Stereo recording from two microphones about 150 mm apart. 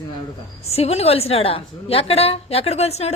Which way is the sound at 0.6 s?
45° left (ahead or behind).